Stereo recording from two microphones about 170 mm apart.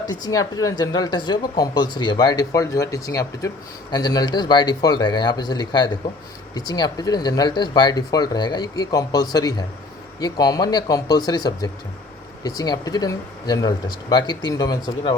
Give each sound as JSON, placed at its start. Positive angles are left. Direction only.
{"t": 0.0, "sound": "speech", "side_deg": 20}